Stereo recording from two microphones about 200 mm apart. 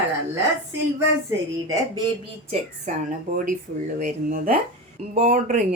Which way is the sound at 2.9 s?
35° right (ahead or behind).